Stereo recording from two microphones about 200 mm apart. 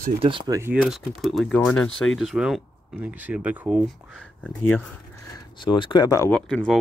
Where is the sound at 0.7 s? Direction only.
5° right (ahead or behind).